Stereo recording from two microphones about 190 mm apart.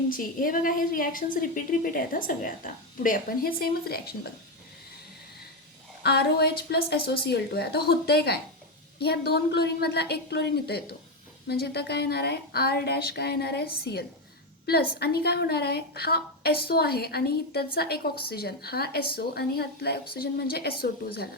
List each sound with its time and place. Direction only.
0.1 s a woman's voice: 45° left (ahead or behind)
6.0 s a woman's voice: 60° left (ahead or behind)